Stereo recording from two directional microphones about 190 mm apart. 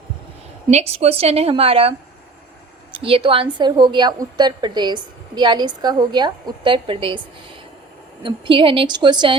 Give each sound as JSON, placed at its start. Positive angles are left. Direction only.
{"t": 0.7, "sound": "a woman's voice", "side_deg": -35}
{"t": 8.2, "sound": "a woman's voice", "side_deg": -25}